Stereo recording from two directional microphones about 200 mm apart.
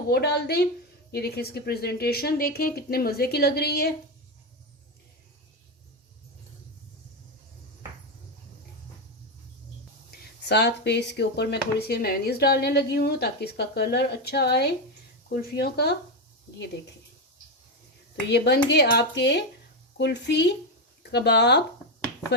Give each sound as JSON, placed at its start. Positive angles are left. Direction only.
{"t": 0.1, "sound": "a woman's voice", "side_deg": 55}
{"t": 10.1, "sound": "a woman's voice", "side_deg": 55}
{"t": 18.3, "sound": "speech", "side_deg": 55}